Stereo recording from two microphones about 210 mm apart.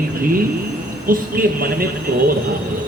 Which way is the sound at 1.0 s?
40° right (ahead or behind).